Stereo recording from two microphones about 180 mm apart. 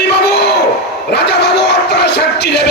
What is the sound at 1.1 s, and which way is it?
Music, 65° left (ahead or behind).